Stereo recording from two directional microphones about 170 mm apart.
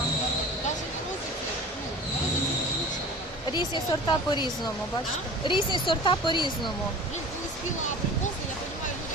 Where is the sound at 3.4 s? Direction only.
25° left (ahead or behind).